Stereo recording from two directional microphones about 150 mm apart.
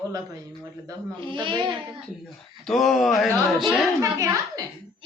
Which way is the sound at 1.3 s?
30° right (ahead or behind).